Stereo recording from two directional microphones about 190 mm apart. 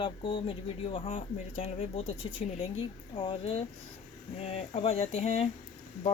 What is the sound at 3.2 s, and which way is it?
Speech, 30° left (ahead or behind).